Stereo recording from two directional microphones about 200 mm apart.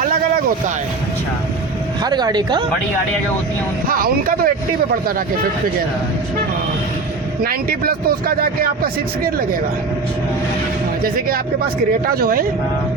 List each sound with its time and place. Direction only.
2.0 s speech: 20° right (ahead or behind)
3.8 s speech: 45° right (ahead or behind)
7.4 s speech: 45° right (ahead or behind)
12.0 s speech: 45° right (ahead or behind)